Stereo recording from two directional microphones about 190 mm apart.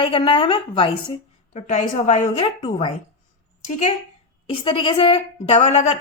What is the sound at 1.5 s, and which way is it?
A woman's voice, 40° left (ahead or behind).